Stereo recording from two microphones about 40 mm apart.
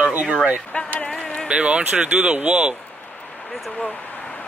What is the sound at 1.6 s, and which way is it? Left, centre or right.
Speech, right.